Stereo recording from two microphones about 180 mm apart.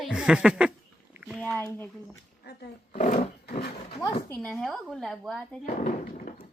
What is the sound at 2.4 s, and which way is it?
Speech, 65° left (ahead or behind).